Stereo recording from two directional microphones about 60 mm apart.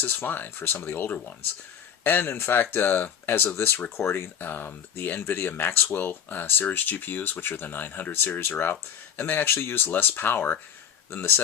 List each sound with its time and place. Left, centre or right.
0.0 s speech: left
3.2 s speech: left
3.5 s speech: left
8.4 s speech: left